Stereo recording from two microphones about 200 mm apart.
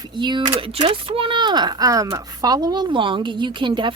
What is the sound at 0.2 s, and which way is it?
Speech, 25° right (ahead or behind).